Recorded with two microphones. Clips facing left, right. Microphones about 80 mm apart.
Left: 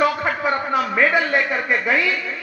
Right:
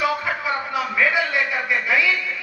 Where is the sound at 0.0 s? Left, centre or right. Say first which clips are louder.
Left 4 dB; left.